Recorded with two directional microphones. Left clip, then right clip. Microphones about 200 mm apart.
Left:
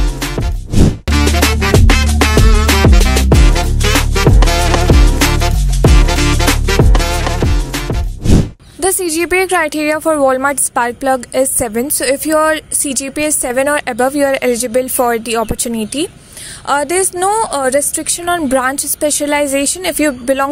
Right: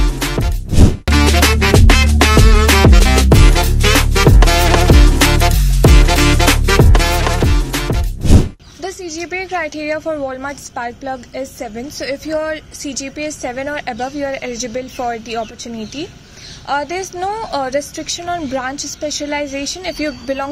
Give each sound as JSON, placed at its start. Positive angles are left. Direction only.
{"t": 0.0, "sound": "music", "side_deg": 0}
{"t": 8.8, "sound": "a woman's voice", "side_deg": 60}